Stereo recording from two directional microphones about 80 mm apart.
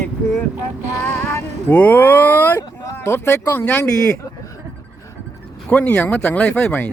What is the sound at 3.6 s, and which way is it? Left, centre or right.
Speech, centre.